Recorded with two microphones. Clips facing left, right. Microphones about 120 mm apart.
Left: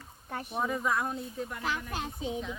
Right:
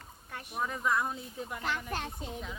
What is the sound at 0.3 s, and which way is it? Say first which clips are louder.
Speech: left 5 dB; 35° left (ahead or behind).